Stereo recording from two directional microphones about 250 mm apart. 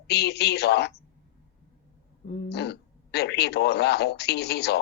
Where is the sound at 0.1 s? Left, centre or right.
Left.